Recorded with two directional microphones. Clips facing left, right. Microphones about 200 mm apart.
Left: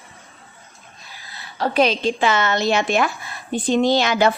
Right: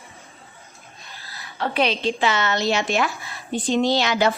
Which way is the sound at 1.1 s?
15° left (ahead or behind).